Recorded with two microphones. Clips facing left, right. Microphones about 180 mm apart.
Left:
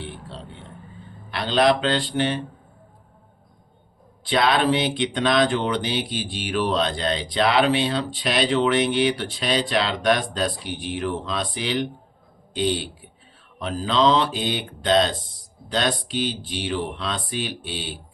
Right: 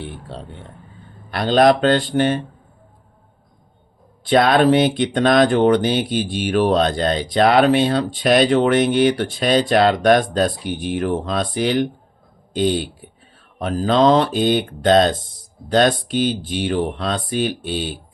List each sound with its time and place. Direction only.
1.3 s speech: 45° right (ahead or behind)
4.3 s speech: 50° right (ahead or behind)